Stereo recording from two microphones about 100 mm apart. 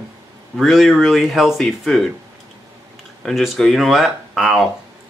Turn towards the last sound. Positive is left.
turn(degrees=0)  # may be behind; listen again after turning